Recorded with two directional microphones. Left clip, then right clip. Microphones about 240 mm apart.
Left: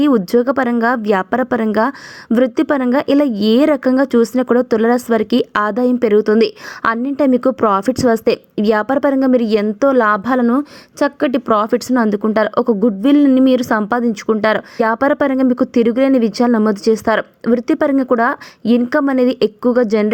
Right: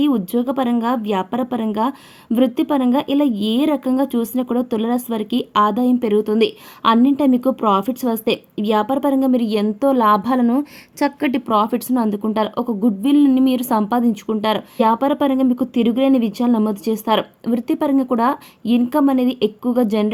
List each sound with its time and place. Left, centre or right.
0.0 s a woman's voice: centre